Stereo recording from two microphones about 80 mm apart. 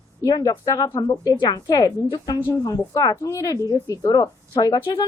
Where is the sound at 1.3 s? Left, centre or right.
Left.